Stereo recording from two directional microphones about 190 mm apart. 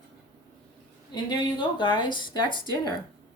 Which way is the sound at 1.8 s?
25° left (ahead or behind).